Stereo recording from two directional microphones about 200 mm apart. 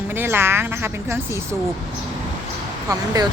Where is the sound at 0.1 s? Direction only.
10° right (ahead or behind).